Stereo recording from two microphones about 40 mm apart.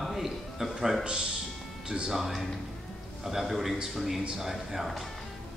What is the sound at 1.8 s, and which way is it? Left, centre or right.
Speech, centre.